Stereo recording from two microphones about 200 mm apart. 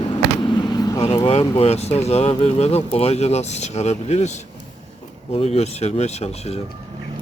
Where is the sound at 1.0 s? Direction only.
30° left (ahead or behind).